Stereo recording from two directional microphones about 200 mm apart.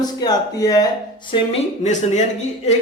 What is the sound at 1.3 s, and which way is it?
Speech, 35° left (ahead or behind).